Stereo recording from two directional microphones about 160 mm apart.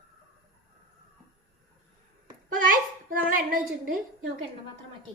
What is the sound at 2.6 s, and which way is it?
Hands, 60° right (ahead or behind).